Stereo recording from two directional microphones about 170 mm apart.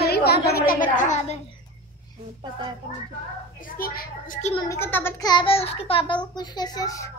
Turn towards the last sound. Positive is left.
turn(degrees=20)  # may be behind; listen again after turning